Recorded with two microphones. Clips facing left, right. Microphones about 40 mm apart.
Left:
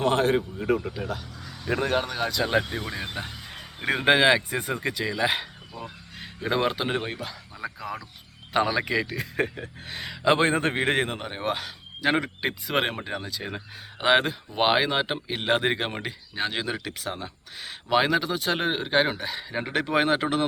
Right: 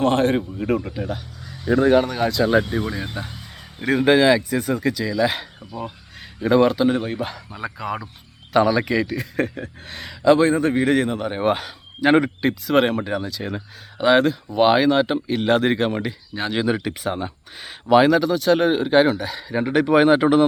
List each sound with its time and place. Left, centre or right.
0.0 s a man's voice: centre
3.8 s speech: left
6.1 s speech: centre
6.8 s speech: left
8.5 s a man's voice: centre
10.2 s a man's voice: left
11.3 s speech: centre
12.4 s a man's voice: centre
14.0 s a man's voice: centre
16.6 s speech: centre
17.7 s speech: centre